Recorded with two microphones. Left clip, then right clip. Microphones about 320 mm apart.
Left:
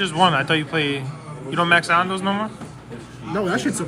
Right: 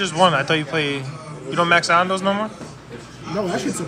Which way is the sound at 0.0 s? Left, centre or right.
Centre.